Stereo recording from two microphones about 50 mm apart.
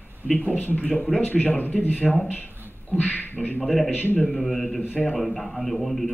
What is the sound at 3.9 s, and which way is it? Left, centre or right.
Speech, left.